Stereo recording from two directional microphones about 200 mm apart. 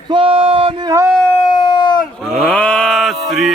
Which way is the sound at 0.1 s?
25° right (ahead or behind).